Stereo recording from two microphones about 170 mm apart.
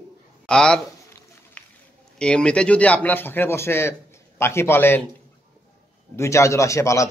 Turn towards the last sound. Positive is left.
turn(degrees=15)  # may be behind; listen again after turning